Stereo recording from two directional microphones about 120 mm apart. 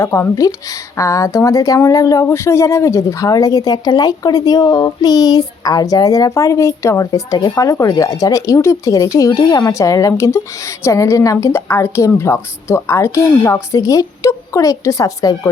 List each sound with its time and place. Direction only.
0.0 s speech: 25° left (ahead or behind)